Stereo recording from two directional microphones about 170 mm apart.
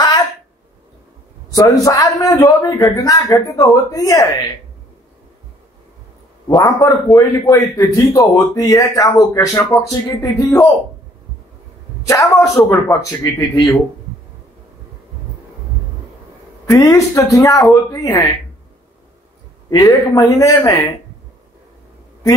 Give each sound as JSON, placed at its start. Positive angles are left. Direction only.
{"t": 1.5, "sound": "a man's voice", "side_deg": 20}
{"t": 6.4, "sound": "a man's voice", "side_deg": 25}
{"t": 12.1, "sound": "a man's voice", "side_deg": 20}
{"t": 16.7, "sound": "a man's voice", "side_deg": 20}
{"t": 19.7, "sound": "a man's voice", "side_deg": 20}